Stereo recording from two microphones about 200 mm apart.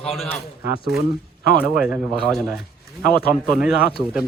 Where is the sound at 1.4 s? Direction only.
50° left (ahead or behind).